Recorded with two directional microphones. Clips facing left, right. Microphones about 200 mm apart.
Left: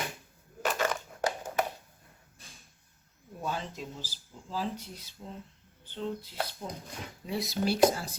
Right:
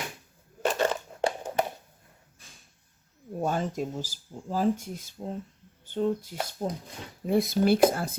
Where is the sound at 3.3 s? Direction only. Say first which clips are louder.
Right 8 dB; 50° right (ahead or behind).